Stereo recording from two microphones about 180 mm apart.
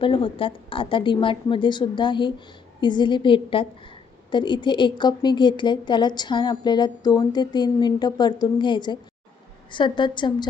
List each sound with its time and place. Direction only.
0.0 s a woman's voice: 30° left (ahead or behind)